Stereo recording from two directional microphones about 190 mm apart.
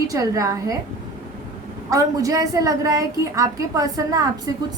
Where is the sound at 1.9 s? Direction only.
15° right (ahead or behind).